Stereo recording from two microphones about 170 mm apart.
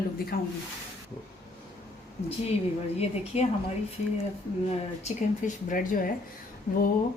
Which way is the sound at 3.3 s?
40° left (ahead or behind).